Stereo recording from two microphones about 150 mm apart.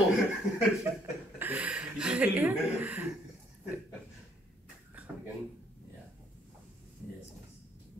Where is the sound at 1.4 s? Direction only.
10° right (ahead or behind).